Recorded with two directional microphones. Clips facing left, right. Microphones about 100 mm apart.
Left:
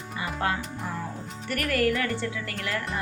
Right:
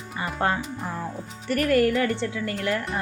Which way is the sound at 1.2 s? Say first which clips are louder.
Left 1 dB; centre (ahead or behind).